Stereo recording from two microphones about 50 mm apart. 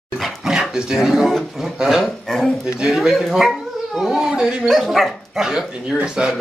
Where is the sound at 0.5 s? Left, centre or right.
Centre.